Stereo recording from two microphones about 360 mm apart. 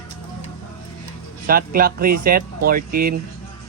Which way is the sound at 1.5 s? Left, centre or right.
Right.